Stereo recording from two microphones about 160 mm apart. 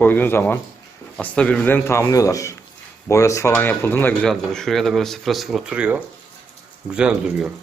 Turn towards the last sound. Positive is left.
turn(degrees=-5)  # may be behind; listen again after turning